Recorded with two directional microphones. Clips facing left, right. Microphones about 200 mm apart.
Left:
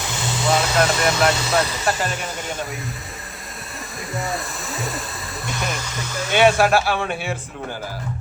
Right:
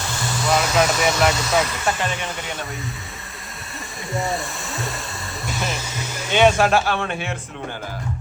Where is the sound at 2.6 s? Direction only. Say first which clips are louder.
Left 1 dB; centre (ahead or behind).